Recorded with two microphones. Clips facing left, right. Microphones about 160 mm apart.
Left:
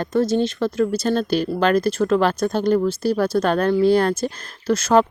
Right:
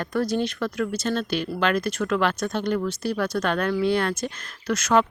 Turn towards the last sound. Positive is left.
turn(degrees=30)  # may be behind; listen again after turning